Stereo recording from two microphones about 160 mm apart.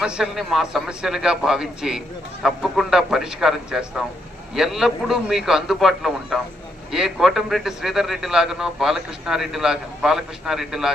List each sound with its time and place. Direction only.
0.0 s a man's voice: 5° right (ahead or behind)